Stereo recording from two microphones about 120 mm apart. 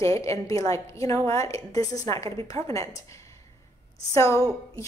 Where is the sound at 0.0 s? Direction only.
25° left (ahead or behind).